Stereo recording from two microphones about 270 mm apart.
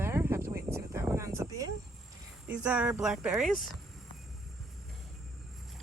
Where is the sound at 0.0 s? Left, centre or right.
Centre.